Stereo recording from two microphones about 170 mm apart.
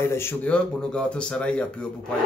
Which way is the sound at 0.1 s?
15° left (ahead or behind).